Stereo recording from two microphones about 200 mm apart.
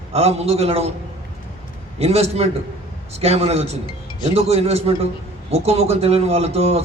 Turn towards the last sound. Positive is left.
turn(degrees=-30)  # may be behind; listen again after turning